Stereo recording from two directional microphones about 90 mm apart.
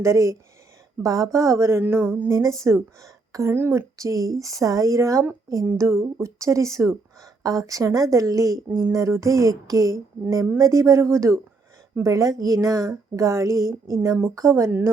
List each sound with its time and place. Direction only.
0.0 s speech: 35° right (ahead or behind)
2.3 s speech: 40° right (ahead or behind)
3.9 s speech: 40° right (ahead or behind)
8.5 s speech: centre (ahead or behind)
8.9 s speech: 35° right (ahead or behind)